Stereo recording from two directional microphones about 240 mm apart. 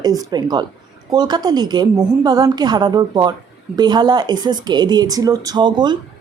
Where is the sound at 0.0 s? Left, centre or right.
Centre.